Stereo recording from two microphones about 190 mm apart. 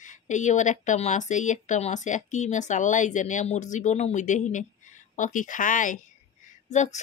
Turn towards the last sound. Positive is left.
turn(degrees=40)  # may be behind; listen again after turning